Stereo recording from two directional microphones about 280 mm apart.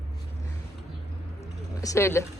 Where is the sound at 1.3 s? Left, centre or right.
Centre.